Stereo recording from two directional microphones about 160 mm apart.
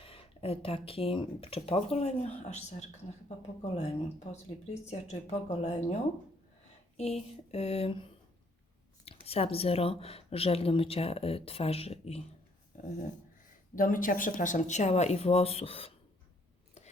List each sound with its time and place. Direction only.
0.0 s speech: 35° left (ahead or behind)
12.7 s a sound: 55° left (ahead or behind)
13.7 s speech: 60° left (ahead or behind); by 15.9 s 35° left (ahead or behind)